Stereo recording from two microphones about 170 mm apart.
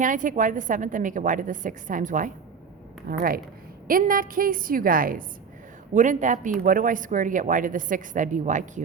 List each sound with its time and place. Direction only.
0.0 s a woman's voice: 50° right (ahead or behind)